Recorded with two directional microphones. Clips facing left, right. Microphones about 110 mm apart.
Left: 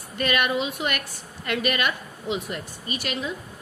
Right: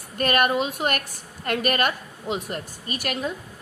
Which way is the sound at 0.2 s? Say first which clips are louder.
Right 3 dB; 45° right (ahead or behind).